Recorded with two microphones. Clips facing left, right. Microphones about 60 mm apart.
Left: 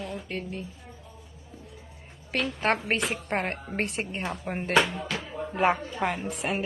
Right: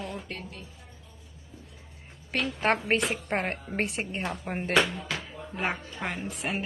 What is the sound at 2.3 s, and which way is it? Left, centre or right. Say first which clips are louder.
Speech: even; centre.